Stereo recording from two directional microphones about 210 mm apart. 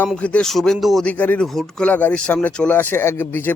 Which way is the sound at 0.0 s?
5° left (ahead or behind).